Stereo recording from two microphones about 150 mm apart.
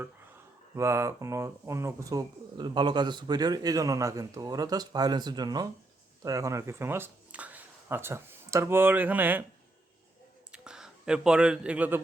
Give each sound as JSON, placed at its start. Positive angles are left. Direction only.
{"t": 0.8, "sound": "speech", "side_deg": -20}
{"t": 10.5, "sound": "speech", "side_deg": -5}